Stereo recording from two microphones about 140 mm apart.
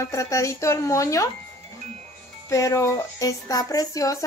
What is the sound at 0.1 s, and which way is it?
A woman's voice, 20° left (ahead or behind).